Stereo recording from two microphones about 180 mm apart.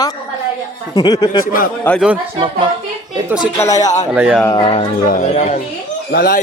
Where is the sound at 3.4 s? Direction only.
15° left (ahead or behind).